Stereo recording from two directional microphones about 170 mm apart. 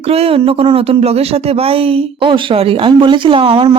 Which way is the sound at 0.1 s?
35° right (ahead or behind).